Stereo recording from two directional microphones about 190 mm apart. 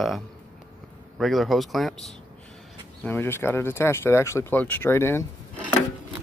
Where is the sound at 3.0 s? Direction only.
10° left (ahead or behind).